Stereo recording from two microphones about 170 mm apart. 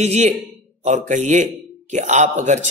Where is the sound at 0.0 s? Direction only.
40° right (ahead or behind).